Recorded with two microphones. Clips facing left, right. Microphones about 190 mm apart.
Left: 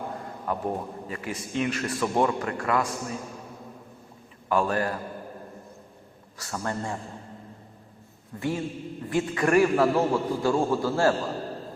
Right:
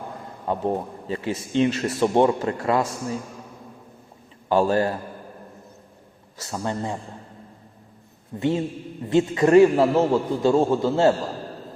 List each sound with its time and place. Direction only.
0.4 s a man's voice: 25° right (ahead or behind)
4.4 s a man's voice: 25° right (ahead or behind)
6.4 s a man's voice: 20° right (ahead or behind)
8.4 s a man's voice: 20° right (ahead or behind)